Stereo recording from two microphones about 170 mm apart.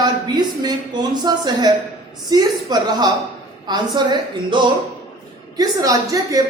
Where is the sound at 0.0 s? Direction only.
25° right (ahead or behind).